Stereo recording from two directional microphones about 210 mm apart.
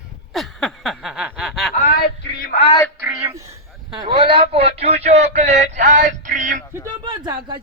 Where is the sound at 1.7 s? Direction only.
40° left (ahead or behind).